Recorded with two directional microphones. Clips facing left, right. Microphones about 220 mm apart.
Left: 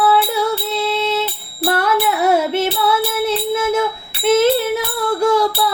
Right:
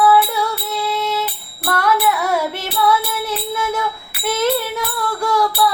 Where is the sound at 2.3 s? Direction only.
25° left (ahead or behind).